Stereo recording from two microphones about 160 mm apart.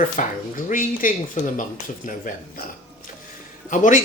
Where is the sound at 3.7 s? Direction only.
50° left (ahead or behind).